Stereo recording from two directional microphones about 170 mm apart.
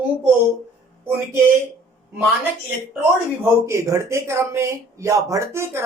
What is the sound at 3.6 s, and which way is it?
Speech, 20° right (ahead or behind).